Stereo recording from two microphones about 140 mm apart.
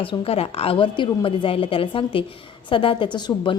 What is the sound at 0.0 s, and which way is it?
Speech, 40° left (ahead or behind).